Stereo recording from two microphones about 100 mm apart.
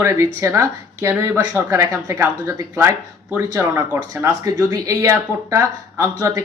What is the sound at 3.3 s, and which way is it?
A woman's voice, 20° right (ahead or behind).